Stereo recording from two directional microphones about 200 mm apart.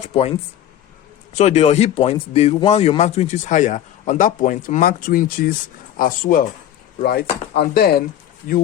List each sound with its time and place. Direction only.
0.1 s speech: 30° left (ahead or behind); by 8.0 s 50° left (ahead or behind)